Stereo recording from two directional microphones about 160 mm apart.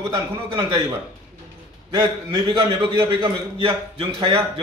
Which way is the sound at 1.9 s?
30° right (ahead or behind).